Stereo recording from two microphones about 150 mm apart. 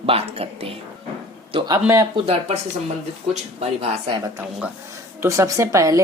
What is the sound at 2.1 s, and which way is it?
Speech, 40° right (ahead or behind).